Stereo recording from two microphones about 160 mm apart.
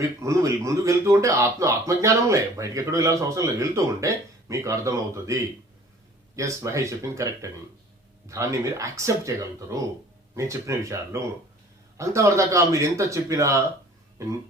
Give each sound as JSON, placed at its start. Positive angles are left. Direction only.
{"t": 0.2, "sound": "speech", "side_deg": -20}